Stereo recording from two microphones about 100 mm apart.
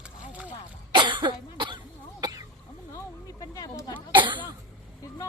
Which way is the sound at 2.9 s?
35° left (ahead or behind).